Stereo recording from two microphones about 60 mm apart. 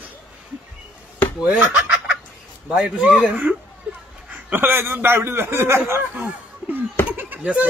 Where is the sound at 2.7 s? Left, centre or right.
Centre.